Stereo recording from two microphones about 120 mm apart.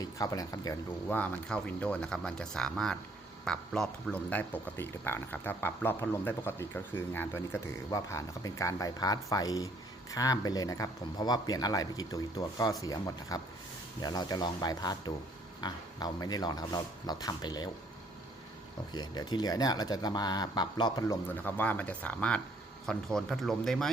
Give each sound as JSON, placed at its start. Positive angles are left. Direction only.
{"t": 0.0, "sound": "speech", "side_deg": 30}
{"t": 1.1, "sound": "speech", "side_deg": 10}
{"t": 4.3, "sound": "speech", "side_deg": 15}
{"t": 7.9, "sound": "speech", "side_deg": 30}
{"t": 18.9, "sound": "speech", "side_deg": 35}
{"t": 21.1, "sound": "speech", "side_deg": 15}